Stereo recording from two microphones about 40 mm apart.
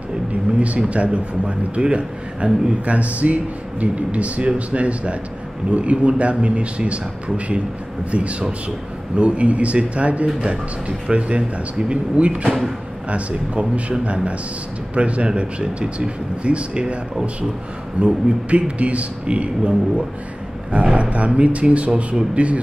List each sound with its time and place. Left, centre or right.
0.6 s a man's voice: right
20.7 s a man's voice: right